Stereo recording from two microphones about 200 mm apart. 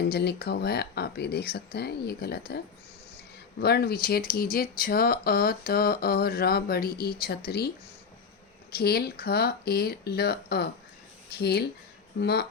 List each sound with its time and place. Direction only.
0.0 s speech: 55° left (ahead or behind)
3.6 s speech: 50° left (ahead or behind)
8.7 s speech: 50° left (ahead or behind)